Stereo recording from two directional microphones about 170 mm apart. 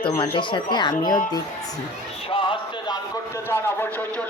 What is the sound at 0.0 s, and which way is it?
Speech, 30° left (ahead or behind).